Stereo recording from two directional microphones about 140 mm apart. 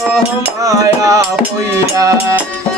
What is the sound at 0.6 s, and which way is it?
Music, 25° right (ahead or behind).